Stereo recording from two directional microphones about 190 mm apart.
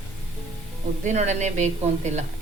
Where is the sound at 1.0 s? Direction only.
40° right (ahead or behind).